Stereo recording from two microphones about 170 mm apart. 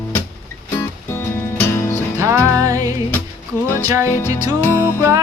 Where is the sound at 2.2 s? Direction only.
15° right (ahead or behind).